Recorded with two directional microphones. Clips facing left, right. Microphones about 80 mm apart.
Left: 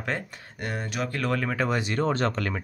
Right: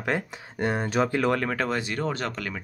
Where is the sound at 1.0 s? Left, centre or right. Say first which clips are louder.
Right 5 dB; centre.